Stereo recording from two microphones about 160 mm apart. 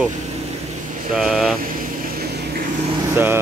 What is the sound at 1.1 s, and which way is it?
Speech, centre (ahead or behind).